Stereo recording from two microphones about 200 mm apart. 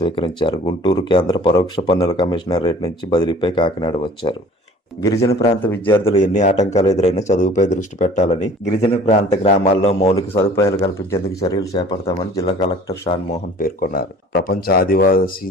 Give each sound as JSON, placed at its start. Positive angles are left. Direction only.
{"t": 0.0, "sound": "speech", "side_deg": 25}
{"t": 10.2, "sound": "speech", "side_deg": 15}
{"t": 13.3, "sound": "speech", "side_deg": 45}